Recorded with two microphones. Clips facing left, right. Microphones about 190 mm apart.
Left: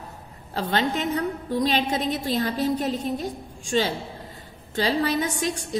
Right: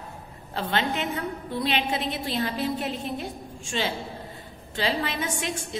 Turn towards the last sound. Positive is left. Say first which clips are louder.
# left 5 dB
turn(degrees=40)  # may be behind; listen again after turning